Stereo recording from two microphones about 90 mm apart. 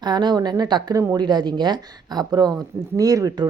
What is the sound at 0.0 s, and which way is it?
Speech, 55° right (ahead or behind).